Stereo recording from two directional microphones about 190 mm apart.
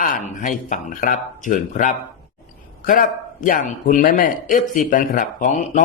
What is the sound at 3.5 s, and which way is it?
Speech, 45° left (ahead or behind).